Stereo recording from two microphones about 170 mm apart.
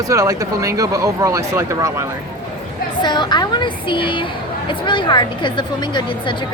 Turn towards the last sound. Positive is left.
turn(degrees=30)  # may be behind; listen again after turning